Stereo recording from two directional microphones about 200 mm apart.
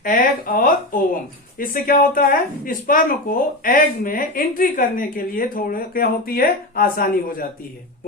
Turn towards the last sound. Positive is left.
turn(degrees=45)  # may be behind; listen again after turning